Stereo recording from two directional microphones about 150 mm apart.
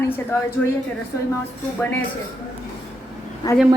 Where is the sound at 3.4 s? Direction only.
30° left (ahead or behind).